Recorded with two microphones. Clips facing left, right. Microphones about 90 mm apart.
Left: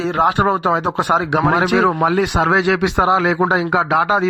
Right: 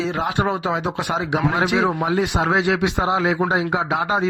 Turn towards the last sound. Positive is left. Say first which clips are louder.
# left 5 dB
turn(degrees=90)